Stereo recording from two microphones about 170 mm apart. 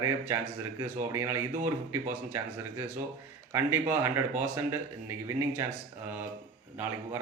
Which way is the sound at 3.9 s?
15° right (ahead or behind).